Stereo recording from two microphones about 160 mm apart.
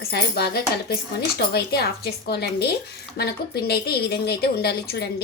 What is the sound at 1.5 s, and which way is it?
A woman's voice, 85° left.